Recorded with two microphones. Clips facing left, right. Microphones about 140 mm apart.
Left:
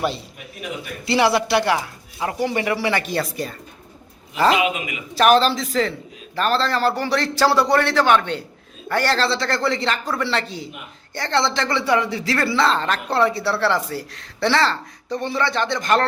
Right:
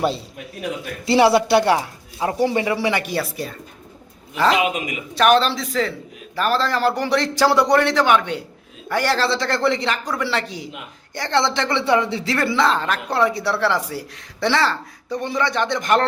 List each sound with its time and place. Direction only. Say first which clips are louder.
1.2 s a woman's voice: right 3 dB; 30° right (ahead or behind)
2.2 s speech: right 3 dB; 20° right (ahead or behind); by 4.6 s 5° left (ahead or behind)
4.6 s a woman's voice: even; 40° right (ahead or behind)
5.1 s speech: left 1 dB; centre (ahead or behind); by 16.0 s 15° right (ahead or behind)